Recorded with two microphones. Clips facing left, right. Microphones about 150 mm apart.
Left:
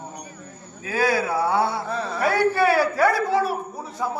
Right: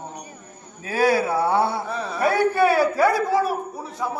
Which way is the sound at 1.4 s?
25° right (ahead or behind).